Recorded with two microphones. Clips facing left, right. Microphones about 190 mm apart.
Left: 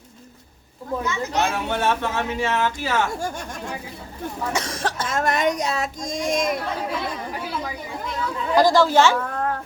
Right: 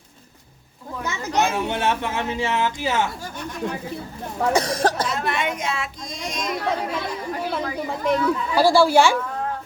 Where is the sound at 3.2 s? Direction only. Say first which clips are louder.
Left 3 dB; 50° left (ahead or behind).